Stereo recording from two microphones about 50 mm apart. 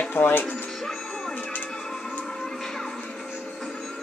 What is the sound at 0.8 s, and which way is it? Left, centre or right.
Music, centre.